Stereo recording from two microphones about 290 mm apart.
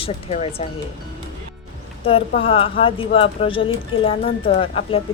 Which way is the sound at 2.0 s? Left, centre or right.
Centre.